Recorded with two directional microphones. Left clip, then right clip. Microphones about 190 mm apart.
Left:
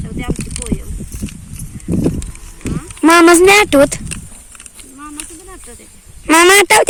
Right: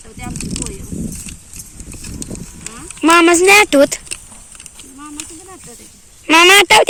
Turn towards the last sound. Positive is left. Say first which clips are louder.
# even
turn(degrees=15)  # may be behind; listen again after turning